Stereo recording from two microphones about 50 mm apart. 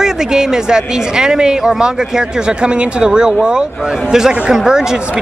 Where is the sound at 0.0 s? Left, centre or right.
Centre.